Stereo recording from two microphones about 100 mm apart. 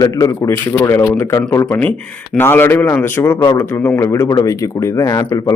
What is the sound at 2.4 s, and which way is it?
A man's voice, 20° left (ahead or behind).